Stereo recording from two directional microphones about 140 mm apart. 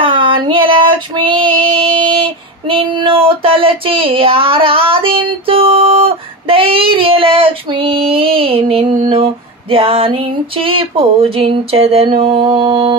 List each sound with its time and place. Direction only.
0.0 s female singing: 35° right (ahead or behind)